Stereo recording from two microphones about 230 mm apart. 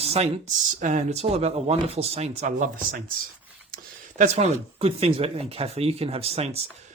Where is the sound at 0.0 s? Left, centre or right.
Right.